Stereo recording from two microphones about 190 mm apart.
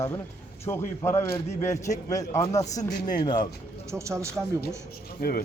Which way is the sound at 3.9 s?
15° right (ahead or behind).